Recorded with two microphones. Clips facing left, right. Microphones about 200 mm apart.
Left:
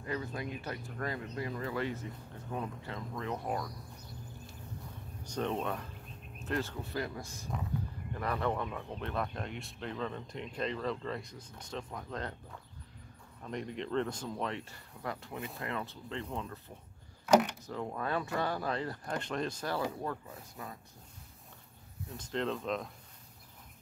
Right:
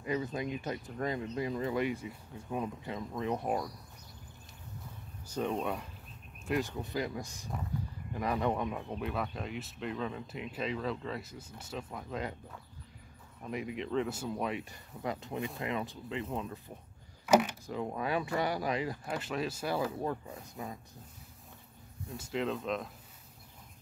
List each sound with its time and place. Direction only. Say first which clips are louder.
0.0 s speech: right 4 dB; 20° right (ahead or behind)
5.2 s speech: right 1 dB; 5° right (ahead or behind)
9.1 s speech: even; centre (ahead or behind)
13.4 s speech: right 1 dB; 5° right (ahead or behind)
17.3 s speech: even; 5° right (ahead or behind)
22.1 s speech: right 1 dB; 5° right (ahead or behind)